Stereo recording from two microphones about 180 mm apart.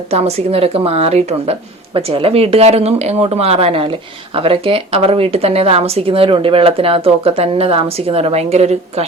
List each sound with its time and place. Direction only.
0.1 s a woman's voice: 35° right (ahead or behind)